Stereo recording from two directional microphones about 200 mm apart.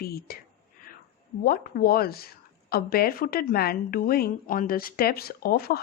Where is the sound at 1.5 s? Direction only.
50° left (ahead or behind).